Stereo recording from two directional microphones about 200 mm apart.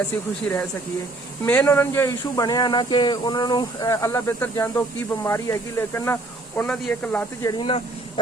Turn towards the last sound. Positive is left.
turn(degrees=25)  # may be behind; listen again after turning